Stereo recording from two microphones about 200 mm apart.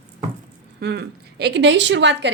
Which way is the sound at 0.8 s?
55° right (ahead or behind).